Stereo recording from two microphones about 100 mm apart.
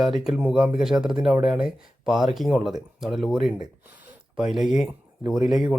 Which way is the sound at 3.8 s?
20° right (ahead or behind).